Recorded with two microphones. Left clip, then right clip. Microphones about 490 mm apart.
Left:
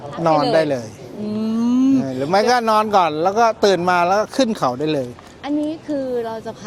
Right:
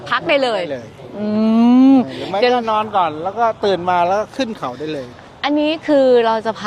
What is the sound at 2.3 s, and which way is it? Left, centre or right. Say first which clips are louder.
Speech: even; left.